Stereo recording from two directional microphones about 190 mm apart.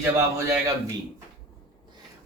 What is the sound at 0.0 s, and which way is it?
Speech, 15° right (ahead or behind).